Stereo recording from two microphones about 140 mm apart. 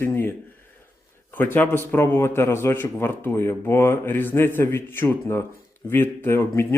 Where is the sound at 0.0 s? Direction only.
15° left (ahead or behind).